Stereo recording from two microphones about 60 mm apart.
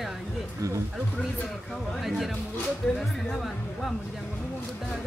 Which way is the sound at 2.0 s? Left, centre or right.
Centre.